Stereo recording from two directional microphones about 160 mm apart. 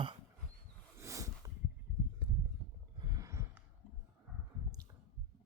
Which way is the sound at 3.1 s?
20° right (ahead or behind).